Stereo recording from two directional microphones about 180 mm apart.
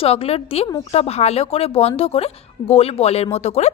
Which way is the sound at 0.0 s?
30° left (ahead or behind).